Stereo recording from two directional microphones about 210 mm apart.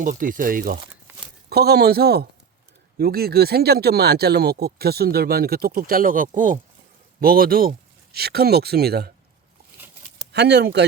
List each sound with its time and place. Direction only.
0.0 s speech: 40° right (ahead or behind)
10.3 s speech: 55° right (ahead or behind)